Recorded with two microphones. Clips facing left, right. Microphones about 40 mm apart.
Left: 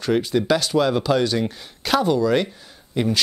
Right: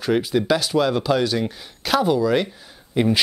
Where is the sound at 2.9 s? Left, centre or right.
Centre.